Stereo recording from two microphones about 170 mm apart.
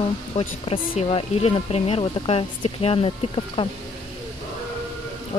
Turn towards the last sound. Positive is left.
turn(degrees=30)  # may be behind; listen again after turning